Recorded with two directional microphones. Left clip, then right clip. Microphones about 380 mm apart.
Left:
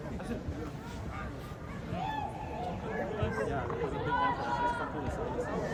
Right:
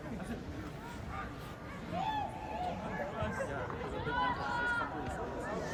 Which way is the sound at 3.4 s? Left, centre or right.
Centre.